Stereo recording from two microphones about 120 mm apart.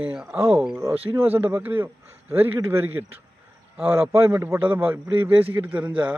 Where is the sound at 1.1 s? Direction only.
15° right (ahead or behind).